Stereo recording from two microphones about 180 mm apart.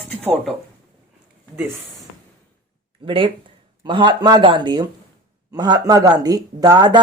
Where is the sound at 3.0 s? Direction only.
30° right (ahead or behind).